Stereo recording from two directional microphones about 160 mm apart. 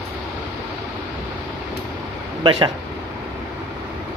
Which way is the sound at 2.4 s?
30° right (ahead or behind).